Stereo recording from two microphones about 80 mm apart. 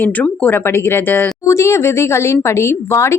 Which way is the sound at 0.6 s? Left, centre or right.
Left.